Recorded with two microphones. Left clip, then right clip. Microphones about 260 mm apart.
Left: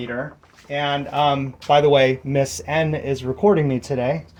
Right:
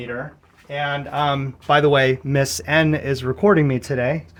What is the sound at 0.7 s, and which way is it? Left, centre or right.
Speech, right.